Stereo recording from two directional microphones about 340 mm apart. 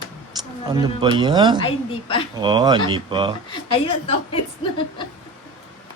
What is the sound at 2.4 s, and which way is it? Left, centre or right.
Speech, centre.